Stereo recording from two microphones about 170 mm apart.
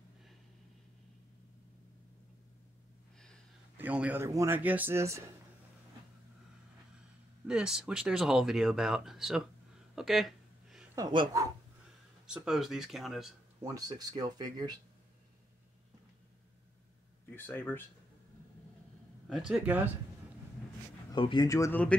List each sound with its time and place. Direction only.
3.7 s a man's voice: 10° right (ahead or behind)
7.4 s speech: 5° right (ahead or behind)
9.9 s a sound: centre (ahead or behind)
11.0 s speech: 25° right (ahead or behind)
12.3 s speech: 5° right (ahead or behind)
13.6 s speech: 20° right (ahead or behind)
17.4 s speech: 10° left (ahead or behind)
19.2 s speech: 5° right (ahead or behind)
21.1 s speech: 30° left (ahead or behind)